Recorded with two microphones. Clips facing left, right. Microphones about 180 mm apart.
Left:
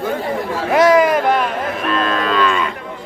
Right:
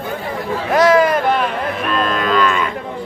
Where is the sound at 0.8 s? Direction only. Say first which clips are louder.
Left 1 dB; 20° left (ahead or behind).